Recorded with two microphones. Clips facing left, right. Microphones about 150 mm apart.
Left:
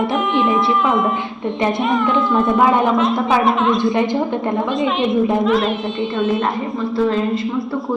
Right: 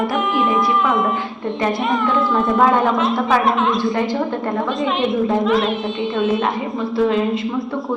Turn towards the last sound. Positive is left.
turn(degrees=0)  # may be behind; listen again after turning